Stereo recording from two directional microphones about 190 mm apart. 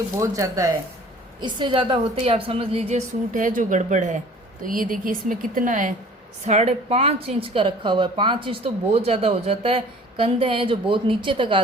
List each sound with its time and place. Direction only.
0.2 s speech: 15° right (ahead or behind)
3.3 s a woman's voice: 45° right (ahead or behind); by 11.6 s 25° right (ahead or behind)